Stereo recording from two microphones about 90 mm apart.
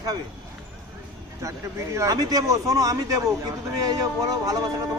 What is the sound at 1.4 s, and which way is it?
A man's voice, 35° right (ahead or behind).